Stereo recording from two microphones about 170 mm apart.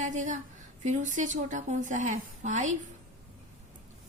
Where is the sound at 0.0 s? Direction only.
45° right (ahead or behind).